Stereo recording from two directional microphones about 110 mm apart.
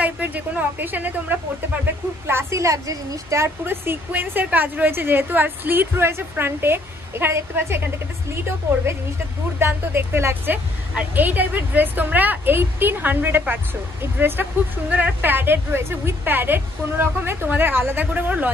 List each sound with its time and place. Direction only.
0.0 s a woman's voice: 15° right (ahead or behind)
9.6 s a woman's voice: 20° right (ahead or behind)